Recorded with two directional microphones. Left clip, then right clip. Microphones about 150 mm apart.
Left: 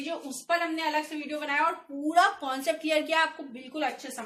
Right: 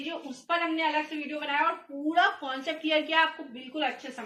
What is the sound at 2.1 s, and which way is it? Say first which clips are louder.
Speech: left 2 dB; 55° left (ahead or behind).